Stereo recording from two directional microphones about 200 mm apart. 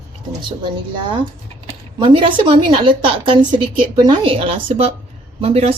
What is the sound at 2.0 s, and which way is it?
A woman's voice, 25° right (ahead or behind).